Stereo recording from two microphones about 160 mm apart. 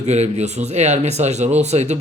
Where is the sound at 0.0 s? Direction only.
45° right (ahead or behind).